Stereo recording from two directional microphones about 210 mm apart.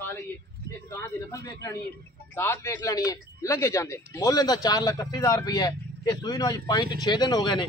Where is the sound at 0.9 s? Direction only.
15° left (ahead or behind).